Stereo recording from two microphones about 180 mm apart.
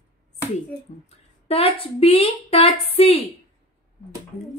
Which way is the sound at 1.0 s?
35° left (ahead or behind).